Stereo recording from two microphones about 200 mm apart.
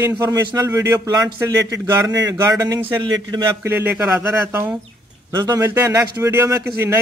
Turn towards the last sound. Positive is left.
turn(degrees=-15)  # may be behind; listen again after turning